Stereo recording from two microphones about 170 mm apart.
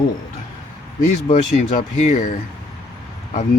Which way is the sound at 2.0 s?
45° left (ahead or behind).